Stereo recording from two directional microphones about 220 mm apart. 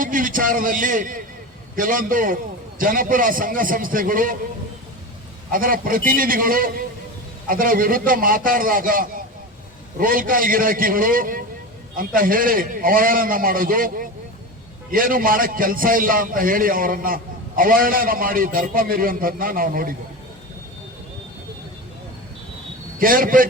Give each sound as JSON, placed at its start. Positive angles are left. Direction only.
{"t": 0.0, "sound": "a man's voice", "side_deg": -40}
{"t": 5.5, "sound": "a man's voice", "side_deg": -40}
{"t": 23.0, "sound": "a man's voice", "side_deg": -40}